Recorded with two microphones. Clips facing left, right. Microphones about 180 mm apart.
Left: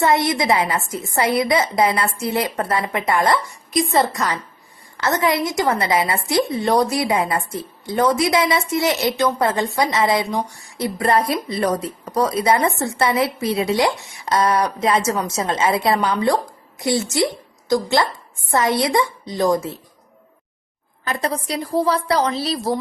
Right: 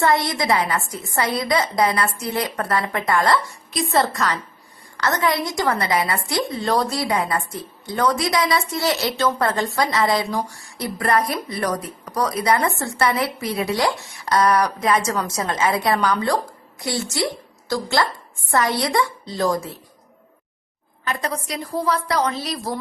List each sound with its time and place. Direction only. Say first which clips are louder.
0.0 s a woman's voice: left 2 dB; 20° left (ahead or behind)
3.5 s a woman's voice: left 2 dB; centre (ahead or behind)
4.9 s a woman's voice: left 2 dB; 20° left (ahead or behind)
12.7 s a woman's voice: left 4 dB; centre (ahead or behind)
13.0 s a woman's voice: left 2 dB; 25° left (ahead or behind)
21.0 s a woman's voice: left 3 dB; 35° left (ahead or behind)